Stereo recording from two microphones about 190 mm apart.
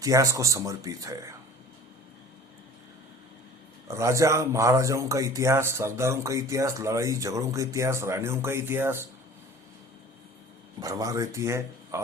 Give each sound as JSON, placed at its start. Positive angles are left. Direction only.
{"t": 0.0, "sound": "a man's voice", "side_deg": -15}
{"t": 3.8, "sound": "a man's voice", "side_deg": -15}
{"t": 10.8, "sound": "a man's voice", "side_deg": -20}